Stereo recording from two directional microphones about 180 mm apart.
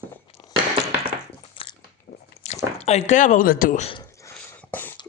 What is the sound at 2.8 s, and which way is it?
Speech, 40° left (ahead or behind).